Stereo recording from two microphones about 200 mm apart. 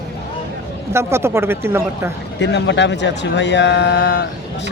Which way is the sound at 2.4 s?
60° left (ahead or behind).